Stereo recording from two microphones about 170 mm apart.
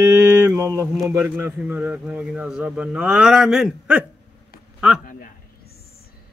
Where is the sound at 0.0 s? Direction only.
20° right (ahead or behind).